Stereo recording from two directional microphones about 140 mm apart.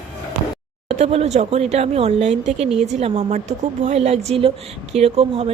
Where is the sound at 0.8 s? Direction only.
50° right (ahead or behind).